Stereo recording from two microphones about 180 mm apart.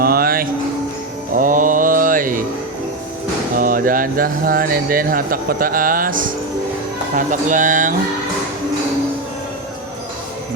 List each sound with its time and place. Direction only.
0.0 s music: 55° right (ahead or behind)
1.4 s mantra: 45° right (ahead or behind)
3.6 s speech: 50° right (ahead or behind)